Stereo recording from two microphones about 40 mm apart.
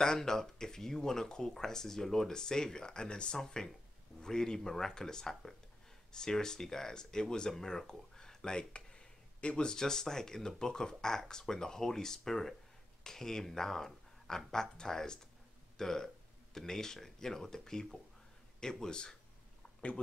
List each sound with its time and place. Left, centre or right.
0.0 s speech: centre
3.3 s speech: centre
9.7 s speech: centre